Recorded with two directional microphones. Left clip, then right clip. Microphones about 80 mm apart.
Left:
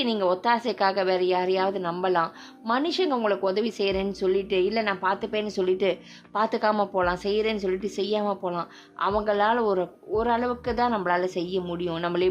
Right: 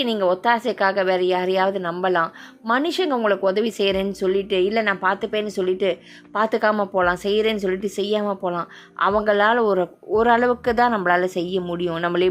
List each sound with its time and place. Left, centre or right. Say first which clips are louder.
0.0 s a woman's voice: right 4 dB; centre
2.6 s a woman's voice: right 4 dB; right
5.6 s speech: right 2 dB; centre
6.3 s speech: right 4 dB; right
9.0 s a woman's voice: right 6 dB; right
10.2 s speech: right 8 dB; right
10.9 s a woman's voice: right 5 dB; right